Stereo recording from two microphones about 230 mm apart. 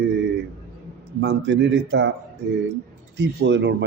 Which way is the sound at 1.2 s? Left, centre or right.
Right.